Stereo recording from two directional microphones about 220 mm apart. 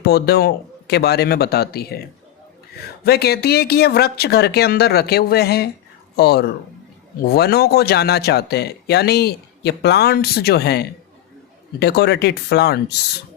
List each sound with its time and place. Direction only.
0.0 s speech: 45° left (ahead or behind)
3.0 s speech: 45° left (ahead or behind)